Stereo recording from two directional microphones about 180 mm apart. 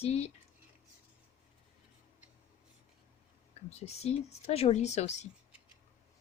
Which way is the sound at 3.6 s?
35° left (ahead or behind).